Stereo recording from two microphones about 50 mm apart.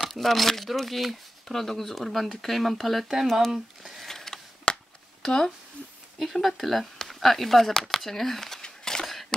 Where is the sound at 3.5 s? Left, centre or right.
Centre.